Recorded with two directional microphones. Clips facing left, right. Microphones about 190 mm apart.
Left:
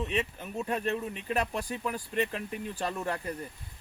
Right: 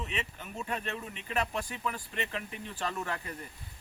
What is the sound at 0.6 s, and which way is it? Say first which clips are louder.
Speech: left 7 dB; 40° left (ahead or behind).